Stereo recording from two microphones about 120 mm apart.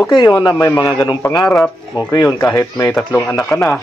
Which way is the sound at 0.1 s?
40° left (ahead or behind).